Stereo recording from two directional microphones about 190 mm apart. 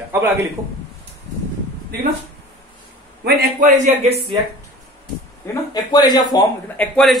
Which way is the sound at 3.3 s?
50° right (ahead or behind).